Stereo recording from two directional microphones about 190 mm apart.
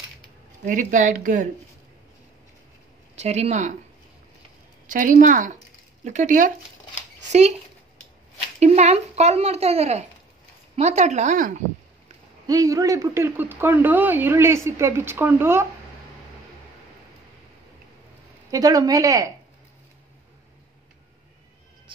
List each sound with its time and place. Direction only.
0.7 s speech: 45° right (ahead or behind)
3.2 s speech: 35° right (ahead or behind)
4.8 s speech: 45° right (ahead or behind)
8.5 s speech: 35° right (ahead or behind)
12.4 s speech: 20° right (ahead or behind)
18.5 s speech: 20° right (ahead or behind)